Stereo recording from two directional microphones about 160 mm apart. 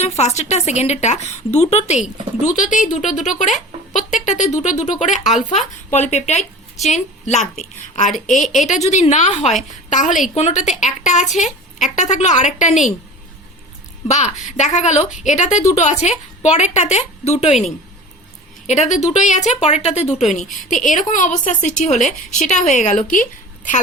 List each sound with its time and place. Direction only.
0.0 s a woman's voice: 45° left (ahead or behind)
14.1 s a woman's voice: 45° left (ahead or behind)
18.7 s a woman's voice: 45° left (ahead or behind)